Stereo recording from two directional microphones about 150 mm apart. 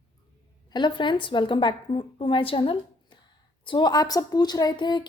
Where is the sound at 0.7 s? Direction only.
30° left (ahead or behind).